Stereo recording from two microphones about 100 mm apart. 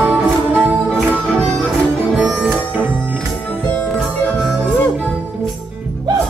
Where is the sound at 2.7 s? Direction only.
20° right (ahead or behind).